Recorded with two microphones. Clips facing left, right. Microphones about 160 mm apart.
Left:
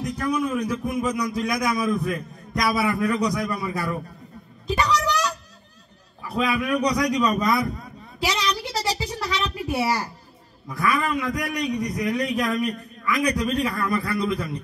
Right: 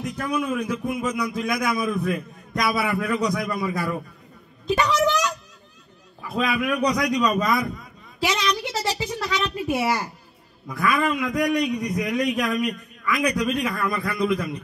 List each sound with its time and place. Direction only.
0.0 s a man's voice: 35° left (ahead or behind)
4.6 s a sound: 35° left (ahead or behind)
6.2 s a man's voice: 35° left (ahead or behind)